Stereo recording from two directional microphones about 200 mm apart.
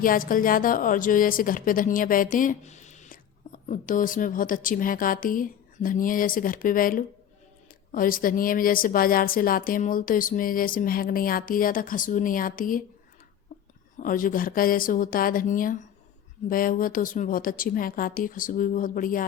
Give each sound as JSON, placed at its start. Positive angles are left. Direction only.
{"t": 0.0, "sound": "a woman's voice", "side_deg": 45}
{"t": 13.5, "sound": "a sound", "side_deg": 45}
{"t": 14.0, "sound": "a woman's voice", "side_deg": 45}